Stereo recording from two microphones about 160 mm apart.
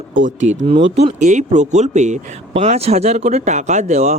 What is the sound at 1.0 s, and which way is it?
Speech, 50° right (ahead or behind).